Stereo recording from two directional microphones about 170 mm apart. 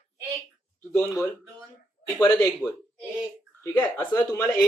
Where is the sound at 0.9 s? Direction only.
20° left (ahead or behind).